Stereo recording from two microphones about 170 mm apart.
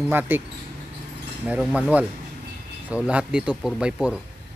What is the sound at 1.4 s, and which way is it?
Speech, 5° right (ahead or behind).